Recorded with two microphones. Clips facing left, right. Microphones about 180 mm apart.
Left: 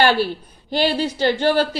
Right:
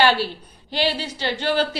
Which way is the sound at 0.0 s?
50° left (ahead or behind).